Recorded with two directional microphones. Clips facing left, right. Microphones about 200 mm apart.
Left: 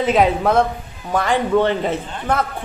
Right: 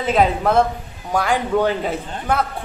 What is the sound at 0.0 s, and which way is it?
A man's voice, centre (ahead or behind).